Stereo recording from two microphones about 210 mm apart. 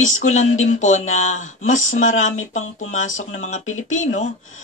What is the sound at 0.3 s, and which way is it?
Speech, 35° left (ahead or behind).